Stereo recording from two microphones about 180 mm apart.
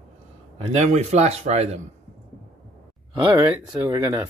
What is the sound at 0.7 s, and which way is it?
Speech, 40° right (ahead or behind).